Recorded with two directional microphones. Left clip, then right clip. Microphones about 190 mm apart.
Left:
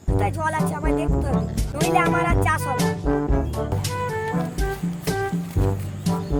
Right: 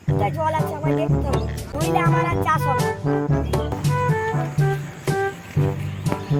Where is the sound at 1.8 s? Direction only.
Centre (ahead or behind).